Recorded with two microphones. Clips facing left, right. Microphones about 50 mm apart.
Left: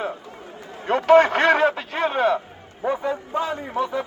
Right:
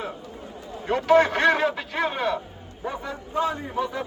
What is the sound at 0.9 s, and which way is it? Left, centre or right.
Speech, left.